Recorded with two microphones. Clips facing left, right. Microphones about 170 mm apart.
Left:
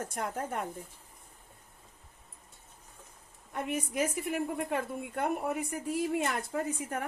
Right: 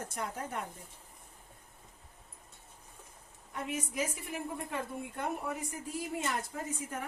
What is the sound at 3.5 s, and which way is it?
A woman's voice, 55° left (ahead or behind).